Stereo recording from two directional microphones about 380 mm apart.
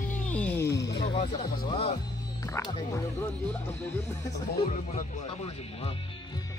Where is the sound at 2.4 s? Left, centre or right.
Centre.